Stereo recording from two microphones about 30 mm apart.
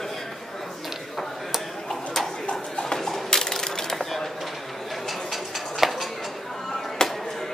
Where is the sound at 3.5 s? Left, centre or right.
Centre.